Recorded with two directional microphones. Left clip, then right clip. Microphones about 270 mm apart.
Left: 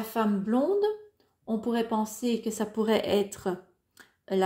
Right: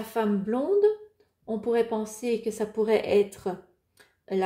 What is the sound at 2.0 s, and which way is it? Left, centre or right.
Speech, left.